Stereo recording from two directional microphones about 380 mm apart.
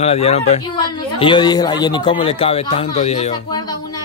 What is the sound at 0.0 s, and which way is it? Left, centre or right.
Speech, centre.